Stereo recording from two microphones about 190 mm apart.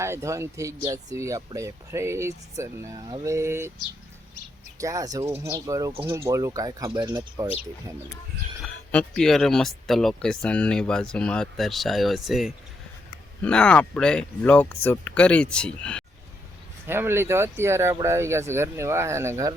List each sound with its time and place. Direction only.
0.0 s speech: 15° right (ahead or behind)
4.8 s speech: 15° right (ahead or behind)
8.6 s speech: 5° left (ahead or behind)
16.8 s speech: 10° right (ahead or behind)